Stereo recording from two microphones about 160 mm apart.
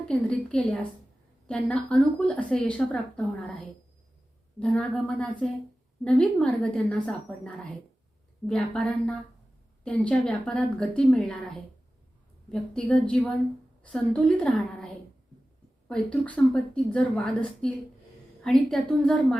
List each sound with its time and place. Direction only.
0.1 s a woman's voice: 10° left (ahead or behind)
4.6 s a woman's voice: 5° left (ahead or behind)
12.5 s a woman's voice: 5° left (ahead or behind)
15.9 s a woman's voice: 10° left (ahead or behind)